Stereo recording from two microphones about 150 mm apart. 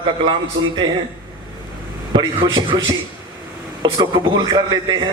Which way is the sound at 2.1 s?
30° right (ahead or behind).